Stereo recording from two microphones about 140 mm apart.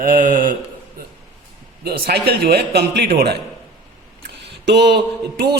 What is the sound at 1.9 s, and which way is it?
Speech, 90° right.